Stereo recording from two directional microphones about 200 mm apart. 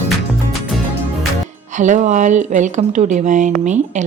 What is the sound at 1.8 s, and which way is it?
Speech, 40° right (ahead or behind).